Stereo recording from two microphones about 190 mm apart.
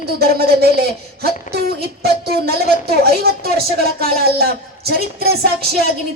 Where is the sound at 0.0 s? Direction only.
55° right (ahead or behind).